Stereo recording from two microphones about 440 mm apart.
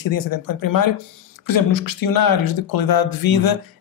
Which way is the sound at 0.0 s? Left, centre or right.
Left.